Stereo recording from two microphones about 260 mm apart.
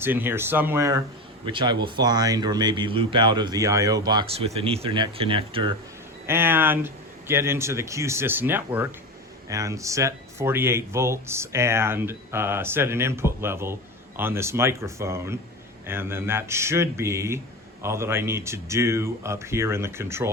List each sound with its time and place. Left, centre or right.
0.0 s speech: centre
6.2 s speech: centre